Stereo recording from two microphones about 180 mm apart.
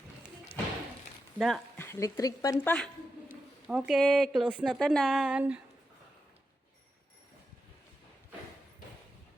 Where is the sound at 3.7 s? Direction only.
5° right (ahead or behind).